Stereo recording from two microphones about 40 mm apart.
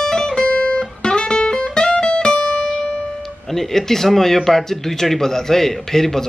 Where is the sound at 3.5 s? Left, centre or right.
Centre.